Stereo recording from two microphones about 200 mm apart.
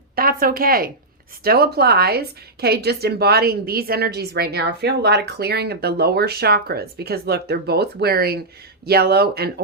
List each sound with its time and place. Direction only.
0.2 s a woman's voice: 45° right (ahead or behind)